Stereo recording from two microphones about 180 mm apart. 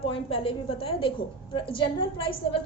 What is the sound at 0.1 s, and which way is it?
A woman's voice, 30° left (ahead or behind).